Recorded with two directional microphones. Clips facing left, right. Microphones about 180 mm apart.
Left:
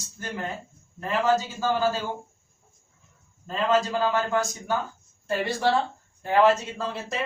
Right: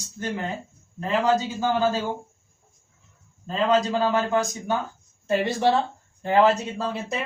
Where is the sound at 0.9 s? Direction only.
15° right (ahead or behind).